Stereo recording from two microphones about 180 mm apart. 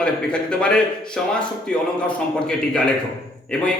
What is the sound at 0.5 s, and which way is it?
Speech, 5° left (ahead or behind).